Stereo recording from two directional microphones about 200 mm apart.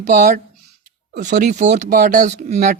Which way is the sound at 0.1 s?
40° right (ahead or behind).